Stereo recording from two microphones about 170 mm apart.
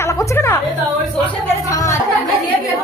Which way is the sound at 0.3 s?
15° left (ahead or behind).